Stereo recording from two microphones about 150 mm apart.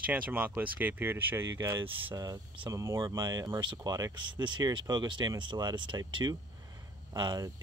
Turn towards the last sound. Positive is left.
turn(degrees=-30)  # may be behind; listen again after turning